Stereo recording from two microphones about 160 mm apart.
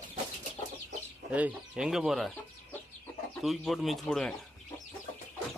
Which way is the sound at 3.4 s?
Centre (ahead or behind).